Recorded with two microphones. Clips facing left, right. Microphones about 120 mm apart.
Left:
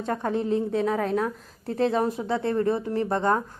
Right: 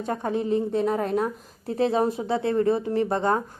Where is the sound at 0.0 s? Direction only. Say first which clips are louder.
Even; 10° right (ahead or behind).